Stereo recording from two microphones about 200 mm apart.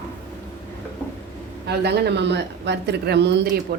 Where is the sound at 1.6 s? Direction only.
55° right (ahead or behind).